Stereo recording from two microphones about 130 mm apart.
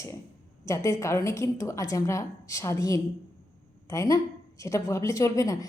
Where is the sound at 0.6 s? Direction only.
25° left (ahead or behind).